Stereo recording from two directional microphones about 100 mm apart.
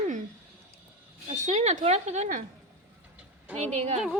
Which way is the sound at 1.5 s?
90° right.